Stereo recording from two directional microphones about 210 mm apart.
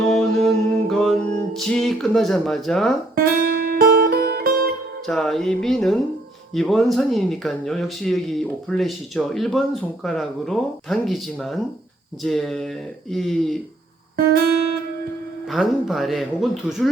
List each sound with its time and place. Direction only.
0.0 s music: centre (ahead or behind)
3.4 s music: 45° right (ahead or behind)
5.0 s speech: centre (ahead or behind)
15.4 s speech: centre (ahead or behind)